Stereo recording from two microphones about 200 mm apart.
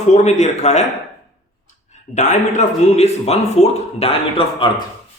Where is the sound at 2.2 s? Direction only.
35° left (ahead or behind).